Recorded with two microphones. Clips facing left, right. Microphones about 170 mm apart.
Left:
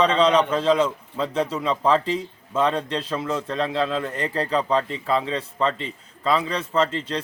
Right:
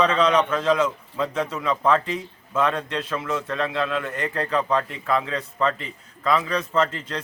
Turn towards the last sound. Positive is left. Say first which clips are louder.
# left 1 dB
turn(degrees=30)  # may be behind; listen again after turning